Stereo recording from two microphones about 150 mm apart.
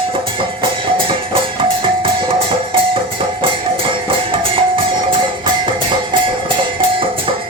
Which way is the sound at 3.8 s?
35° right (ahead or behind).